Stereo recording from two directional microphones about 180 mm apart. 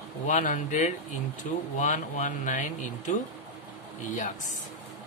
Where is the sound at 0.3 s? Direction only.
45° left (ahead or behind).